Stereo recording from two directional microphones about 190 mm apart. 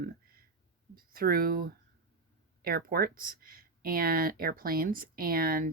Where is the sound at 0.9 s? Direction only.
50° right (ahead or behind).